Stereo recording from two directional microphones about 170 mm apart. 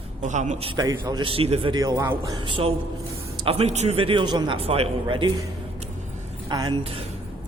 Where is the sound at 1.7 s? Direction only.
20° right (ahead or behind).